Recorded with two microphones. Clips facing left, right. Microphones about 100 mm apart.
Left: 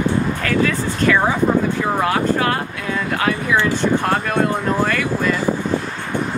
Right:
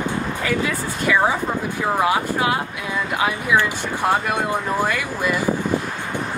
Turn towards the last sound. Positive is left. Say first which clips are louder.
# left 3 dB
turn(degrees=-15)  # may be behind; listen again after turning